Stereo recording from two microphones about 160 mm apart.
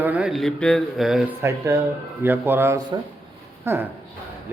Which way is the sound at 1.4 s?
20° right (ahead or behind).